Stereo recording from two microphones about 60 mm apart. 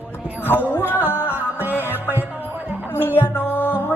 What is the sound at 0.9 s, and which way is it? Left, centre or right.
Music, right.